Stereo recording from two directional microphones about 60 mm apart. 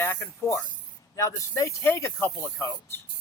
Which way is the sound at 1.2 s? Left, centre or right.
Left.